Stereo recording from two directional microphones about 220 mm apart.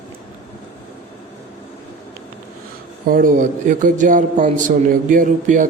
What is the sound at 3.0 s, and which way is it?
Speech, 40° right (ahead or behind).